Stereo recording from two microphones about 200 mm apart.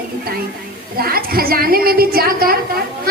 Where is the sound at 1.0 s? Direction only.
50° right (ahead or behind).